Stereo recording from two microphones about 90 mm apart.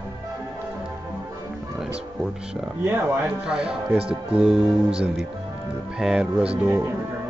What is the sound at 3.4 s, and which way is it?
Speech, 10° right (ahead or behind).